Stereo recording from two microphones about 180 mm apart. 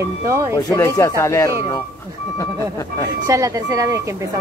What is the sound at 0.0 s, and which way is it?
Speech, 15° right (ahead or behind).